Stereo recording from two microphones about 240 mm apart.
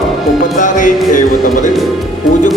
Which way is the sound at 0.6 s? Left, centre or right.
Left.